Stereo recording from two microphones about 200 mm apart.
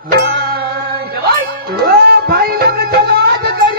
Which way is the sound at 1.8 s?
50° right (ahead or behind).